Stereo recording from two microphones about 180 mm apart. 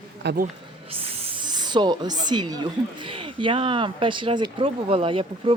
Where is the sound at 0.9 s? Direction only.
35° right (ahead or behind).